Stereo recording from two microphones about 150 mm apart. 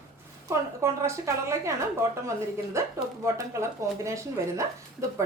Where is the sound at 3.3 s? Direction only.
20° right (ahead or behind).